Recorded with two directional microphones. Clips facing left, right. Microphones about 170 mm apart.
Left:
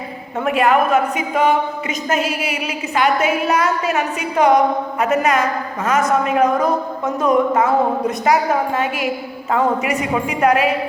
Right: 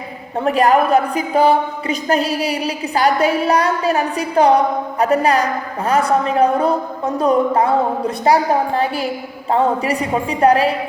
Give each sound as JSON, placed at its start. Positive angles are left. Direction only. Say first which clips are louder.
{"t": 0.3, "sound": "a woman's voice", "louder": "right 2 dB", "side_deg": -35}